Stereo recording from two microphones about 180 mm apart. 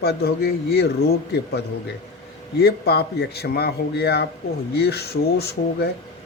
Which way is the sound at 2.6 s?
65° left (ahead or behind).